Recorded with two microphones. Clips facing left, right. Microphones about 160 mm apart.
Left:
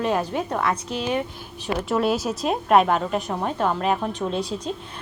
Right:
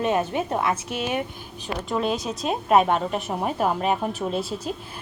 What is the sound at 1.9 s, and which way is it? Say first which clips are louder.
A woman's voice: left 3 dB; 5° left (ahead or behind).